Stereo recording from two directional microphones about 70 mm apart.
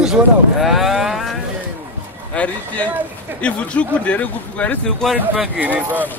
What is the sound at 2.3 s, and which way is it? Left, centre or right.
Speech, left.